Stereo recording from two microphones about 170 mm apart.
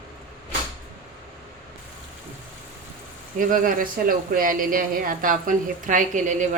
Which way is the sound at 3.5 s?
55° right (ahead or behind).